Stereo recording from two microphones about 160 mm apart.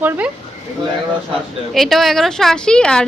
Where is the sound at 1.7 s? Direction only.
Centre (ahead or behind).